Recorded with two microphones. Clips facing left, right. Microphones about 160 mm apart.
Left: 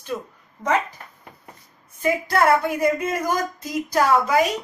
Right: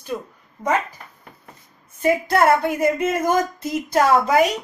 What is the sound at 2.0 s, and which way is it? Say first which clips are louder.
Speech: right 3 dB; 25° right (ahead or behind).